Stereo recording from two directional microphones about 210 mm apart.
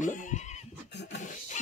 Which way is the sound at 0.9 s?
55° left (ahead or behind).